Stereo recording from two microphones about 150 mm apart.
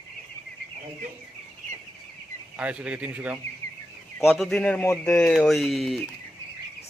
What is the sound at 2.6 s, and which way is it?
A man's voice, 10° right (ahead or behind).